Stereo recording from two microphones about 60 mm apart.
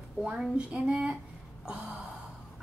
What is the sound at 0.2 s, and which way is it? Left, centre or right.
Speech, centre.